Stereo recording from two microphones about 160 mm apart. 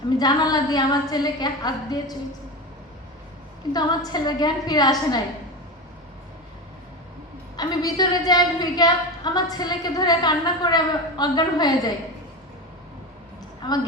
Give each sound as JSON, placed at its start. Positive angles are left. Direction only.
{"t": 0.2, "sound": "a woman's voice", "side_deg": 25}
{"t": 3.7, "sound": "a woman's voice", "side_deg": 25}
{"t": 7.5, "sound": "a woman's voice", "side_deg": 25}
{"t": 13.6, "sound": "a woman's voice", "side_deg": 25}